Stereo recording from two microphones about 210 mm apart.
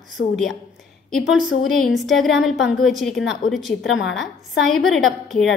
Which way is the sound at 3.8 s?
60° left (ahead or behind).